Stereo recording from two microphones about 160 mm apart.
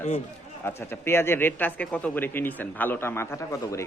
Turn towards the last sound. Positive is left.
turn(degrees=20)  # may be behind; listen again after turning